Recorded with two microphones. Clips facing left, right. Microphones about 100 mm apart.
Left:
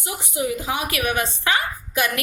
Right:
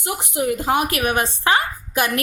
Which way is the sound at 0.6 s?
50° right (ahead or behind).